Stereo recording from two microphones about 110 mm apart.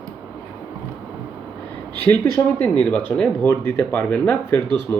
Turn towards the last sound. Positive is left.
turn(degrees=25)  # may be behind; listen again after turning